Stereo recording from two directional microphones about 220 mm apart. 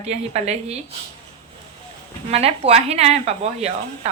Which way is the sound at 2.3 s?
30° right (ahead or behind).